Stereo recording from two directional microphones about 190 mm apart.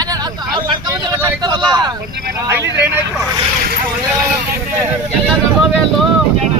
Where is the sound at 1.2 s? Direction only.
20° right (ahead or behind).